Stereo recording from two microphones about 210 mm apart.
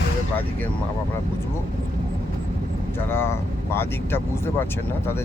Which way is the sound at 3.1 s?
10° left (ahead or behind).